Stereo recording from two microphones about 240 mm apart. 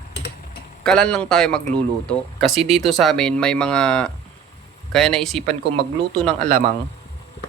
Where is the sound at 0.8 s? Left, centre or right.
Centre.